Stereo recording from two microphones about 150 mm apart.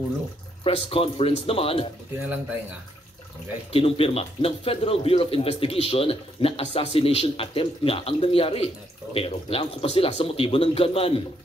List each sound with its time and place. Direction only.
0.7 s a man's voice: 40° left (ahead or behind)
2.2 s speech: 10° right (ahead or behind)
3.7 s a man's voice: 35° left (ahead or behind)